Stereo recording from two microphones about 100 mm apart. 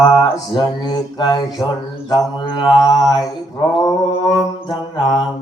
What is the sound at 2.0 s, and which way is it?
Mantra, 45° left (ahead or behind).